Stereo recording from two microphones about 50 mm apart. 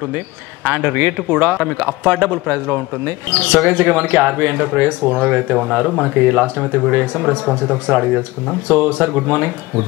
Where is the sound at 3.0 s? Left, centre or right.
Right.